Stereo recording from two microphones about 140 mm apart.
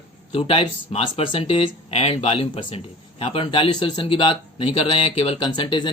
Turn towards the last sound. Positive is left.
turn(degrees=35)  # may be behind; listen again after turning